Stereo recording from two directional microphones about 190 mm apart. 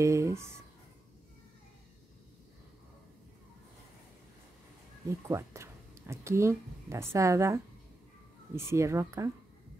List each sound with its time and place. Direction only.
0.0 s speech: 15° right (ahead or behind)
5.3 s speech: 15° right (ahead or behind)